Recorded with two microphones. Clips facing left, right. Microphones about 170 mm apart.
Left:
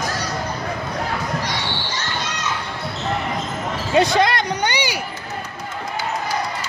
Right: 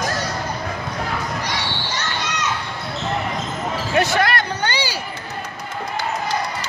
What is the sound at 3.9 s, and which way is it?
Basketball bounce, 20° left (ahead or behind).